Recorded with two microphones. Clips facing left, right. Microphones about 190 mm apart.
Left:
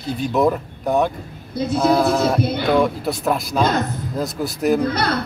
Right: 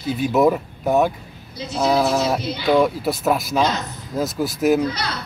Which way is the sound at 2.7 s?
Centre (ahead or behind).